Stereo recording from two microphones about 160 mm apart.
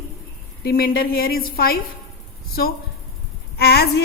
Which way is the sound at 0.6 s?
70° left (ahead or behind).